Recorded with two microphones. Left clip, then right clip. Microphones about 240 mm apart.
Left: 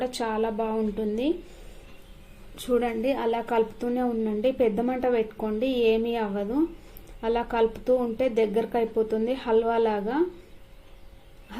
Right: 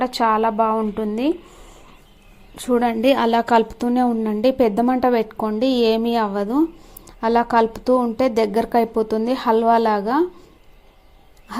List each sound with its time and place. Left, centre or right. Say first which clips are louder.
0.0 s a woman's voice: right 10 dB; right
2.6 s a woman's voice: right 6 dB; right
3.0 s a woman's voice: right 9 dB; right